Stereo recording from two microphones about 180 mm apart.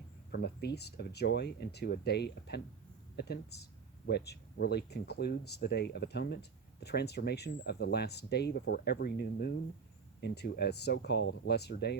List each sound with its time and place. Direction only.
0.3 s speech: 65° left (ahead or behind)